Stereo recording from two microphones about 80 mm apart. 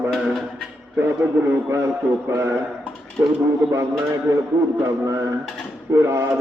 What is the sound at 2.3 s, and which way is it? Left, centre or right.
Speech, right.